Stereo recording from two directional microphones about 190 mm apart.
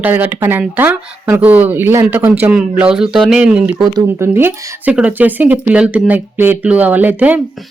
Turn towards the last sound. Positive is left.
turn(degrees=-10)  # may be behind; listen again after turning